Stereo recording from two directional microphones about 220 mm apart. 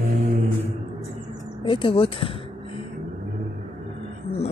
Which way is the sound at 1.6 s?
25° left (ahead or behind).